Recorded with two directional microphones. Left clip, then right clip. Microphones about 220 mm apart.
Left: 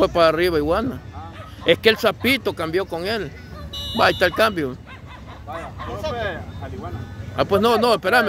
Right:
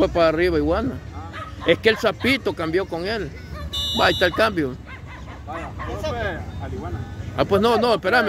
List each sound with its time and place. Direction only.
0.0 s speech: 20° left (ahead or behind)
7.3 s speech: 5° left (ahead or behind)